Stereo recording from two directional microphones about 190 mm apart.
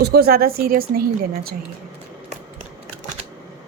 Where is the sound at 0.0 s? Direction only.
55° right (ahead or behind).